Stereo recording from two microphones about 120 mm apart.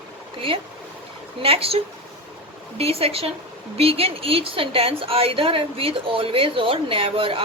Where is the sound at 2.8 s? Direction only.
55° right (ahead or behind).